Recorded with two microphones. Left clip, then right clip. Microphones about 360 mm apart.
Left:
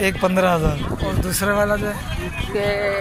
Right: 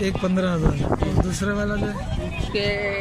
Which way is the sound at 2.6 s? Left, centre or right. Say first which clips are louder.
Left 5 dB; left.